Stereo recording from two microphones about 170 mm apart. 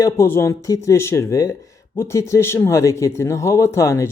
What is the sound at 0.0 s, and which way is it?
Speech, 15° left (ahead or behind).